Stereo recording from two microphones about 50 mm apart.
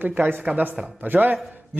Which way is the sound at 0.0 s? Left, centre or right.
Right.